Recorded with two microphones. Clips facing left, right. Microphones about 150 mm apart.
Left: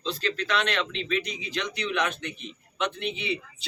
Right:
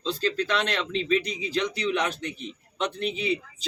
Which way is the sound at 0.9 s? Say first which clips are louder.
Right 5 dB; 35° right (ahead or behind).